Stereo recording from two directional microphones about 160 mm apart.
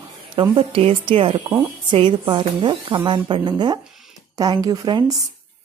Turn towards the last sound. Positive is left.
turn(degrees=-25)  # may be behind; listen again after turning